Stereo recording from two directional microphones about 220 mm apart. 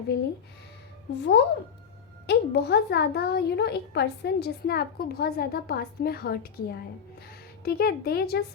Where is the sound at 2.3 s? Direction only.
50° left (ahead or behind).